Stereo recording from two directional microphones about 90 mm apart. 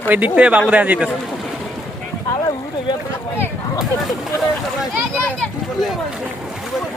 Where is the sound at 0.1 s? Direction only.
15° right (ahead or behind).